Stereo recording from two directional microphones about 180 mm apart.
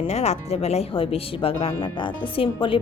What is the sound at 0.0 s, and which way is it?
A woman's voice, 35° left (ahead or behind).